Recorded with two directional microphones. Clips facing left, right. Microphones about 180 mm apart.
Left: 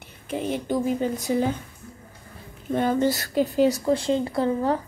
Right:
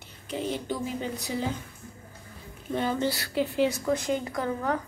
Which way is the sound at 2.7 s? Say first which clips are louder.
Left 6 dB; 50° left (ahead or behind).